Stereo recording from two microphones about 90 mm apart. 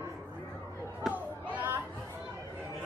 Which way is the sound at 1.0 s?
Centre (ahead or behind).